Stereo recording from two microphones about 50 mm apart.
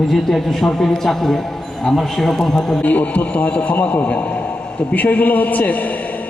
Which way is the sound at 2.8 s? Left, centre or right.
Left.